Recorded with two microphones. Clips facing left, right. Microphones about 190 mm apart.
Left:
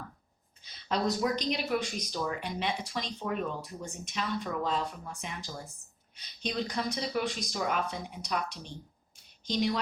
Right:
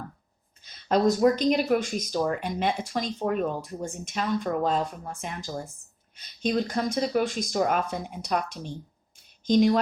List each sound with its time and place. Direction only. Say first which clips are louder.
0.6 s speech: right 8 dB; 50° right (ahead or behind)